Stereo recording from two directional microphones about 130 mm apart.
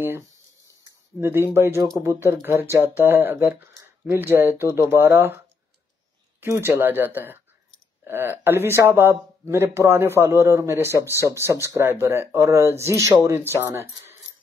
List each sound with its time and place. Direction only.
1.2 s speech: 20° right (ahead or behind)
6.4 s speech: 15° right (ahead or behind)